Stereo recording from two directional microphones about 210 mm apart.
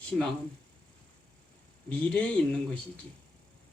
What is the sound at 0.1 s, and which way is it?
Speech, centre (ahead or behind).